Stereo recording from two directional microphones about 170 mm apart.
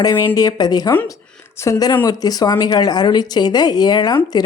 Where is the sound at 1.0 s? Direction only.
10° left (ahead or behind).